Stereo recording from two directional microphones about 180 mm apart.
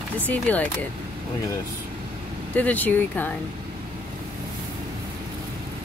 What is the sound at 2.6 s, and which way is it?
Speech, 10° left (ahead or behind).